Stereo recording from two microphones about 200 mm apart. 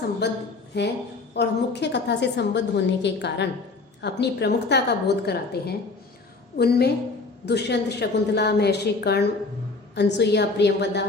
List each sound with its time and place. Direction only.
0.2 s a woman's voice: 55° left (ahead or behind)